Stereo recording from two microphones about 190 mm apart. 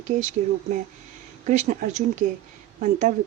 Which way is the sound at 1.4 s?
40° right (ahead or behind).